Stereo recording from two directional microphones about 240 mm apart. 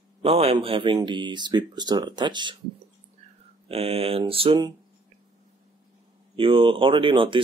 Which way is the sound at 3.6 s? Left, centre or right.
Right.